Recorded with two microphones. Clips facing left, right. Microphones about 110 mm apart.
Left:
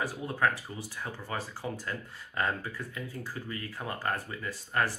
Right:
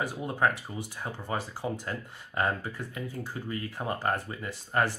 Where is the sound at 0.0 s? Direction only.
20° right (ahead or behind).